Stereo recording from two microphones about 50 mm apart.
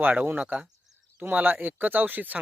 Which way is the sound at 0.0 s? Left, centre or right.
Right.